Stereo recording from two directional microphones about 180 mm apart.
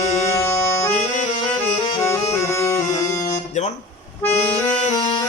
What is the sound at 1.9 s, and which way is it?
Music, 15° left (ahead or behind).